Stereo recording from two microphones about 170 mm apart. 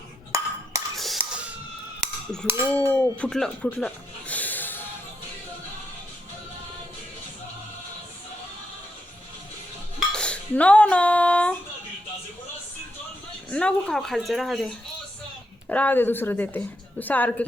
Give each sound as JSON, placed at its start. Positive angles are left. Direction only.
{"t": 0.3, "sound": "dishes", "side_deg": -20}
{"t": 0.9, "sound": "a sound", "side_deg": 0}
{"t": 2.0, "sound": "a sound", "side_deg": 5}
{"t": 2.9, "sound": "speech", "side_deg": 5}
{"t": 10.1, "sound": "dishes", "side_deg": 5}
{"t": 13.5, "sound": "speech", "side_deg": 5}
{"t": 15.7, "sound": "a woman's voice", "side_deg": 10}